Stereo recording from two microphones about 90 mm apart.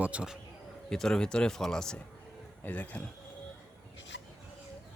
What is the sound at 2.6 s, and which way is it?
Speech, 15° left (ahead or behind).